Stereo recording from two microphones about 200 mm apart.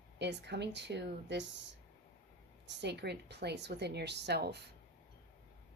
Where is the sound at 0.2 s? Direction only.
60° right (ahead or behind).